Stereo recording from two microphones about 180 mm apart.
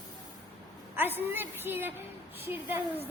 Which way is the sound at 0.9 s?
10° right (ahead or behind).